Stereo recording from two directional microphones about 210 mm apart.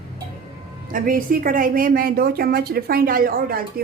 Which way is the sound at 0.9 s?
40° right (ahead or behind).